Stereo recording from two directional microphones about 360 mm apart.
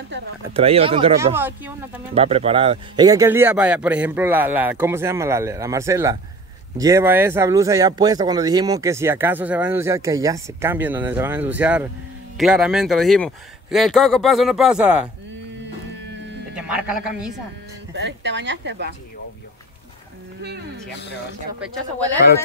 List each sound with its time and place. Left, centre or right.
0.5 s speech: centre
2.1 s speech: centre
16.5 s a man's voice: centre
17.9 s speech: right
20.4 s speech: right